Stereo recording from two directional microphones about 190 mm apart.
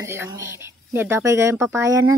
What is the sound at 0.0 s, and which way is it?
Speech, 15° right (ahead or behind).